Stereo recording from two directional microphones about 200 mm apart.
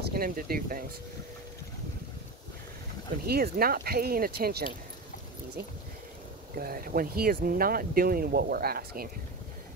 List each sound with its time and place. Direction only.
0.1 s speech: 45° right (ahead or behind)
3.3 s speech: 50° right (ahead or behind)
6.6 s speech: 45° right (ahead or behind)